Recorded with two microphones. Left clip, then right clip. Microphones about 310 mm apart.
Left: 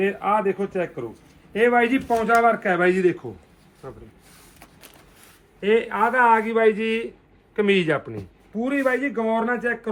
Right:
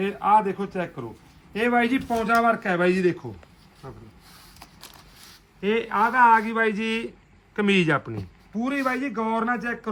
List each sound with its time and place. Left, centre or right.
0.0 s speech: centre
5.5 s a man's voice: centre